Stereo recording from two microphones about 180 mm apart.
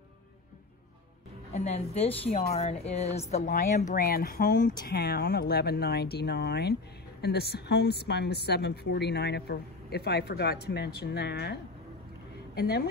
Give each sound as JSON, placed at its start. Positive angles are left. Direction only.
{"t": 1.5, "sound": "a woman's voice", "side_deg": 35}
{"t": 3.5, "sound": "speech", "side_deg": 55}
{"t": 12.5, "sound": "a woman's voice", "side_deg": 60}